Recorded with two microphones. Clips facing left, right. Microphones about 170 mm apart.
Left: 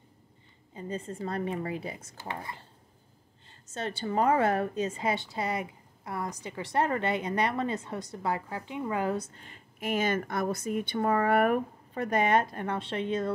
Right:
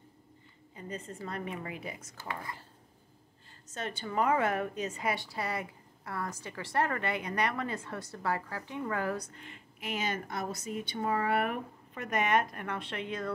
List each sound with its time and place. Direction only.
0.7 s a woman's voice: 30° left (ahead or behind)
3.7 s a woman's voice: 30° left (ahead or behind)
12.0 s a woman's voice: 30° left (ahead or behind)